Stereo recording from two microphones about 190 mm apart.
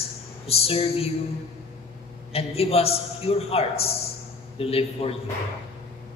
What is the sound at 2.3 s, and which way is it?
A woman's voice, 30° left (ahead or behind).